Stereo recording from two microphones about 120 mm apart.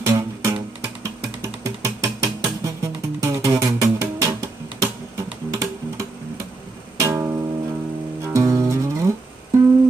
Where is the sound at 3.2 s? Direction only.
25° right (ahead or behind).